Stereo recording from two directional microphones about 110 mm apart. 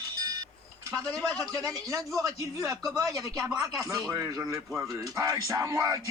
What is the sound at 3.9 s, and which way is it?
Speech, 25° right (ahead or behind).